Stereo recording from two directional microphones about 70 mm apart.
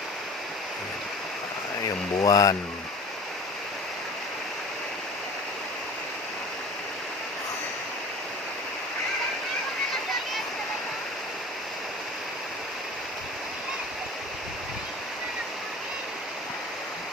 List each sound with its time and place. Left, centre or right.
2.2 s speech: left